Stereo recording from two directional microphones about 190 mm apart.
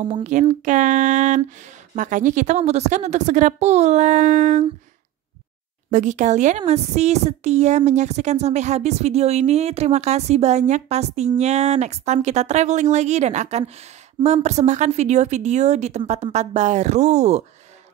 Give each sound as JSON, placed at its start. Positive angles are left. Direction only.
{"t": 0.0, "sound": "speech", "side_deg": -25}
{"t": 0.3, "sound": "speech", "side_deg": -40}
{"t": 5.9, "sound": "speech", "side_deg": -40}